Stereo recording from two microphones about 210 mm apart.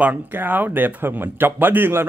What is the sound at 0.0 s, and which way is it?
A man's voice, 10° right (ahead or behind).